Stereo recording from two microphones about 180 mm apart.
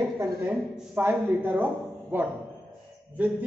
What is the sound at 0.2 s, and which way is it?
A man's voice, 10° right (ahead or behind).